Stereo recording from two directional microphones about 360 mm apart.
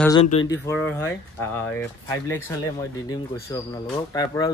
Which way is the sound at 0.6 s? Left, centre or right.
Centre.